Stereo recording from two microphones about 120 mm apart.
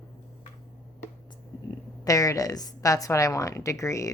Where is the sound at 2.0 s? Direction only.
30° left (ahead or behind).